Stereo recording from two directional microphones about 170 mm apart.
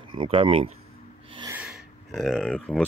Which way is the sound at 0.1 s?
30° right (ahead or behind).